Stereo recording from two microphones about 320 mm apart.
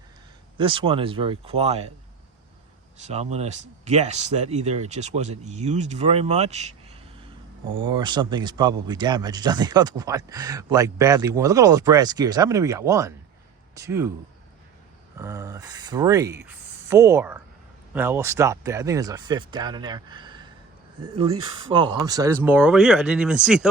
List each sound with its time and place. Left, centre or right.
0.5 s speech: centre
3.0 s speech: right
7.8 s speech: centre
15.2 s speech: centre
21.4 s speech: centre